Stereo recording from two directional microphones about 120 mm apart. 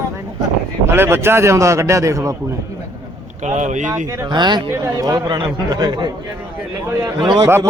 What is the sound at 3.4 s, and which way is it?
Speech, 80° right.